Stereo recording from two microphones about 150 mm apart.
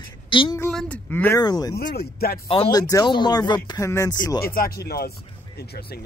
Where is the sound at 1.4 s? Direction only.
25° left (ahead or behind).